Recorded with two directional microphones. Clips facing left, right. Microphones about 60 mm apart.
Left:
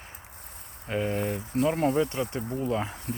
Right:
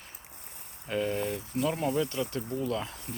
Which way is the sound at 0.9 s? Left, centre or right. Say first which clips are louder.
Left 2 dB; left.